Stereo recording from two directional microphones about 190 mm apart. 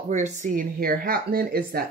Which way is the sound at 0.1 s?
40° right (ahead or behind).